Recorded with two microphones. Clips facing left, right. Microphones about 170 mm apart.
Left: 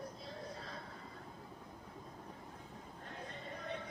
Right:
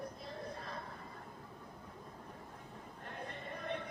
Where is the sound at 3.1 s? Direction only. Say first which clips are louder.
Right 2 dB; 60° right (ahead or behind).